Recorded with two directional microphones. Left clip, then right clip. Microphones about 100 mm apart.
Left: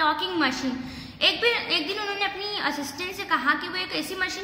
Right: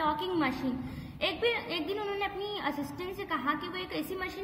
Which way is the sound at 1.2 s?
25° right (ahead or behind).